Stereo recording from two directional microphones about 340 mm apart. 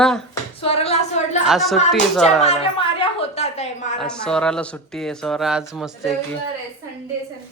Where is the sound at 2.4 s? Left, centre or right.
Centre.